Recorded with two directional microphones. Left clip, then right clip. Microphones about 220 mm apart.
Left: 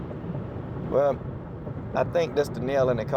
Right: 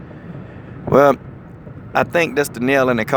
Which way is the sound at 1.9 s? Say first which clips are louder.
Right 8 dB; 40° right (ahead or behind).